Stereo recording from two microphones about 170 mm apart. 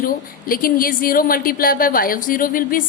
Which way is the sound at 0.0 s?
55° left (ahead or behind).